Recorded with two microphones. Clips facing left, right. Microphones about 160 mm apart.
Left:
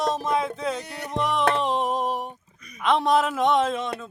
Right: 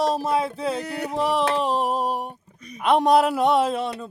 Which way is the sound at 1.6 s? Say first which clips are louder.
Right 1 dB; 10° right (ahead or behind).